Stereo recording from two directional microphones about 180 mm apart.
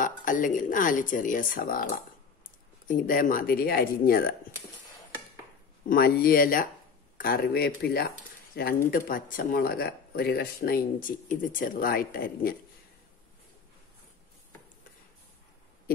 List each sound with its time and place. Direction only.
0.0 s speech: 45° left (ahead or behind)
2.9 s speech: 50° left (ahead or behind)
5.9 s speech: 55° left (ahead or behind)